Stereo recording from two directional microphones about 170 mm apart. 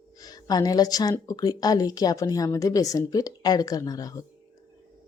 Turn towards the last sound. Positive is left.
turn(degrees=20)  # may be behind; listen again after turning